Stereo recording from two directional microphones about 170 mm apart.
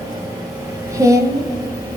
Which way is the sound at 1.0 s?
20° right (ahead or behind).